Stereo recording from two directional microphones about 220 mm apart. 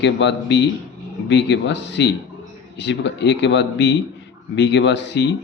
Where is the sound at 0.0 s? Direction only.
55° left (ahead or behind).